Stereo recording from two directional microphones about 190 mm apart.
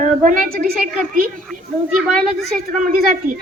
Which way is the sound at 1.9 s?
Centre (ahead or behind).